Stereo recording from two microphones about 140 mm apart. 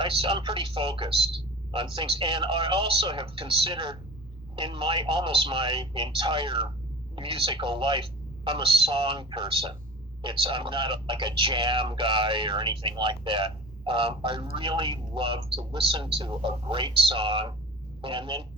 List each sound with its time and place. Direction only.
0.0 s speech: 40° right (ahead or behind)